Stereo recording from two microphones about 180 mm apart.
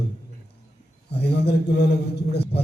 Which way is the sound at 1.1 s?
65° left (ahead or behind).